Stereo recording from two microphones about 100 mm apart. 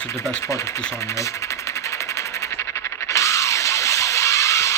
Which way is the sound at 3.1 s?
30° left (ahead or behind).